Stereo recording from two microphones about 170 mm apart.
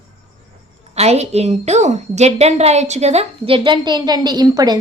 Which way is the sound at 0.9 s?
40° right (ahead or behind).